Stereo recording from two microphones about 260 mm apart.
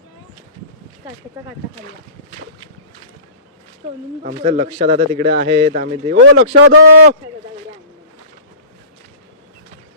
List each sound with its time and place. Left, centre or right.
4.2 s speech: right
6.2 s a man's voice: right